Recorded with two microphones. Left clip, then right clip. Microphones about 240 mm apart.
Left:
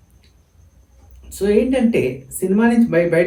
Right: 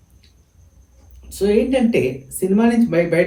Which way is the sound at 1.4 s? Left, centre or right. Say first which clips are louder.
Even; centre.